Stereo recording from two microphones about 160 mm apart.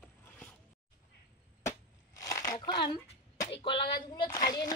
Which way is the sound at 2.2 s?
20° left (ahead or behind).